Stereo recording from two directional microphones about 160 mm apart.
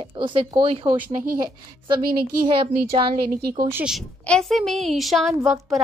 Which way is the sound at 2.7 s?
65° right (ahead or behind).